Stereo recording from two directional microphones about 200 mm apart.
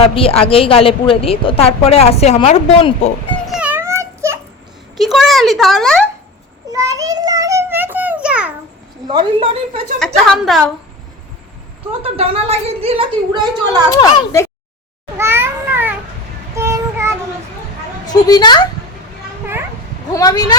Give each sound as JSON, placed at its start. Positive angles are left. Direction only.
{"t": 0.0, "sound": "a woman's voice", "side_deg": 30}
{"t": 3.5, "sound": "a sound", "side_deg": -5}
{"t": 4.9, "sound": "speech", "side_deg": 0}
{"t": 6.7, "sound": "child singing", "side_deg": -15}
{"t": 9.0, "sound": "a woman's voice", "side_deg": -25}
{"t": 10.3, "sound": "a woman's voice", "side_deg": 0}
{"t": 12.0, "sound": "a woman's voice", "side_deg": -30}
{"t": 13.9, "sound": "a woman's voice", "side_deg": 20}
{"t": 15.2, "sound": "babbling", "side_deg": -10}
{"t": 16.6, "sound": "child singing", "side_deg": -15}
{"t": 18.0, "sound": "a woman's voice", "side_deg": 20}
{"t": 20.1, "sound": "a woman's voice", "side_deg": 20}